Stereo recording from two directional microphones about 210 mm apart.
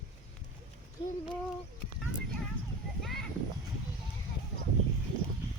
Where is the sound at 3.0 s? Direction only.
Centre (ahead or behind).